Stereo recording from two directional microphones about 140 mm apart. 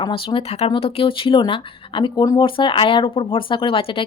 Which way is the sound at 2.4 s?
35° left (ahead or behind).